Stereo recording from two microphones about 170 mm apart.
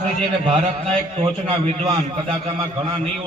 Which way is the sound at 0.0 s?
35° right (ahead or behind).